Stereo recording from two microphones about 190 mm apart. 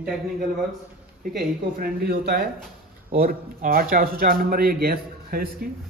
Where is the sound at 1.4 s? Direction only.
50° right (ahead or behind).